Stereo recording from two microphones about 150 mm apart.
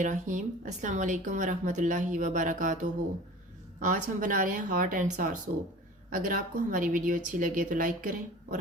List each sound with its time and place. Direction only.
0.0 s a woman's voice: 55° right (ahead or behind)
3.8 s a woman's voice: 60° right (ahead or behind)